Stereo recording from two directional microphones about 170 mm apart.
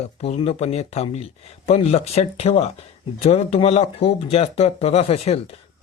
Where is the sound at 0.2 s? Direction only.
35° left (ahead or behind).